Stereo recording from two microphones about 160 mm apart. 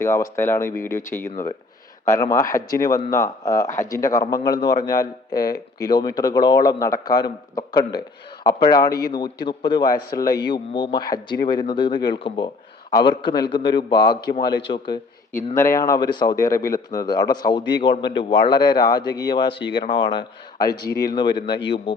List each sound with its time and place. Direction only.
0.0 s speech: 15° left (ahead or behind)
15.5 s speech: 20° left (ahead or behind)